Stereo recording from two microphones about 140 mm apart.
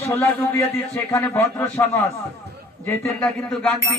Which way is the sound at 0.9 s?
20° left (ahead or behind).